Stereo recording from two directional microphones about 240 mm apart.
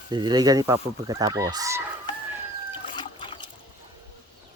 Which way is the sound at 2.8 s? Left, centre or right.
Centre.